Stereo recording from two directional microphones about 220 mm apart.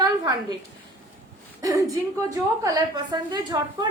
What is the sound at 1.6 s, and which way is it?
A woman's voice, 15° right (ahead or behind).